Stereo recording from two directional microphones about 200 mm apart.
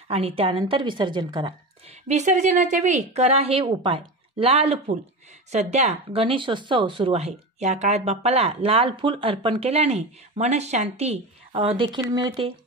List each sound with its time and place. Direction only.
0.1 s speech: 30° right (ahead or behind)
2.0 s speech: 35° right (ahead or behind)